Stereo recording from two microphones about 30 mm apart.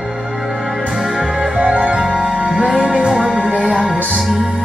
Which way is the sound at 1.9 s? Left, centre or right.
Right.